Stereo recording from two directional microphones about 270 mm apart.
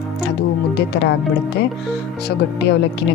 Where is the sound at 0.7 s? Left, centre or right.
Left.